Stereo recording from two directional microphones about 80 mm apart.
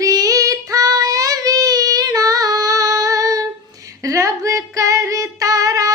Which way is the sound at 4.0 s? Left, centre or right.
Right.